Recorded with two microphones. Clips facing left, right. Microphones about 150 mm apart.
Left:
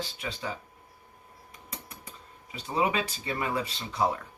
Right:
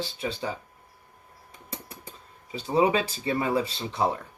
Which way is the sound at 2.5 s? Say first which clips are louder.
Right 5 dB; 30° right (ahead or behind).